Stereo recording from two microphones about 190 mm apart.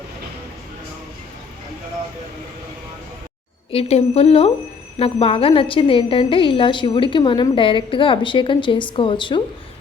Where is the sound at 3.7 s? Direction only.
30° left (ahead or behind).